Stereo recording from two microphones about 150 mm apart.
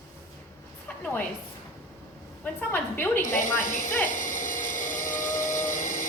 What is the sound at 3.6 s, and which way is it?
Speech, 65° left (ahead or behind).